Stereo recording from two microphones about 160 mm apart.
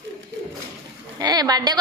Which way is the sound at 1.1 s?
25° right (ahead or behind).